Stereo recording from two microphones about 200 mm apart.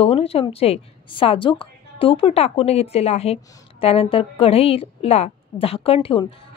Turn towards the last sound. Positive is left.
turn(degrees=25)  # may be behind; listen again after turning